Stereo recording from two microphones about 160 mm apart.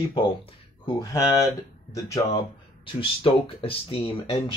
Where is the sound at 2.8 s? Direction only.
35° left (ahead or behind).